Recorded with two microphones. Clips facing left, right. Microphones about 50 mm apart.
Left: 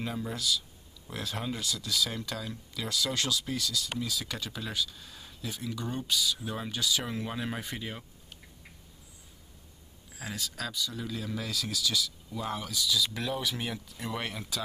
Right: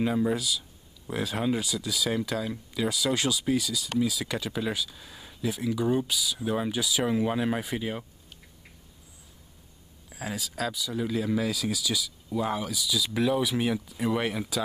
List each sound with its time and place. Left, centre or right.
0.0 s speech: centre
10.1 s speech: centre